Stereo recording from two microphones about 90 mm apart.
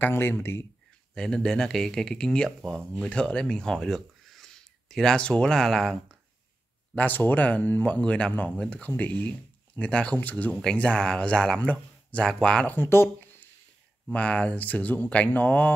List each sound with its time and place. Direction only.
0.0 s speech: 25° left (ahead or behind)
1.1 s speech: 5° left (ahead or behind)
7.0 s speech: 20° left (ahead or behind)
12.7 s speech: 25° left (ahead or behind)
14.1 s speech: 15° left (ahead or behind)